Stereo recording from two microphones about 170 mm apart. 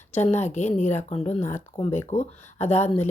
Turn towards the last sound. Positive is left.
turn(degrees=40)  # may be behind; listen again after turning